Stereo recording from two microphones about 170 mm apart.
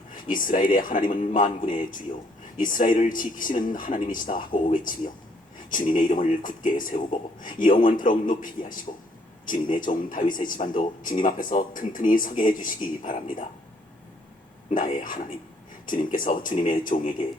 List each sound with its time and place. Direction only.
0.1 s speech: 50° left (ahead or behind)
14.7 s speech: 50° left (ahead or behind)